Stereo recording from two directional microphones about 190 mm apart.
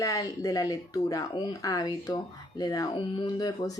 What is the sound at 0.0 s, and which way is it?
Speech, 15° left (ahead or behind).